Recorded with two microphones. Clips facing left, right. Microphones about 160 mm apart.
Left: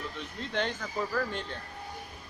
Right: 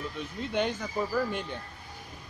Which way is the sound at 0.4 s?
10° right (ahead or behind).